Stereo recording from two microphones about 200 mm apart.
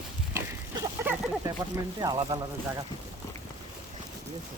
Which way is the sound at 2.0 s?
20° right (ahead or behind).